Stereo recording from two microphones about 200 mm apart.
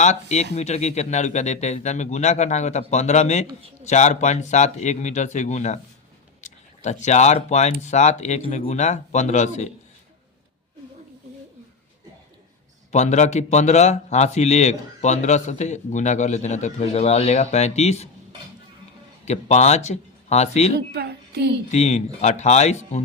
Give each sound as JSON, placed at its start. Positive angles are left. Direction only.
{"t": 0.0, "sound": "a man's voice", "side_deg": 35}
{"t": 12.9, "sound": "a man's voice", "side_deg": 35}
{"t": 19.2, "sound": "speech", "side_deg": 35}
{"t": 20.7, "sound": "a child's voice", "side_deg": -55}
{"t": 21.7, "sound": "a man's voice", "side_deg": 35}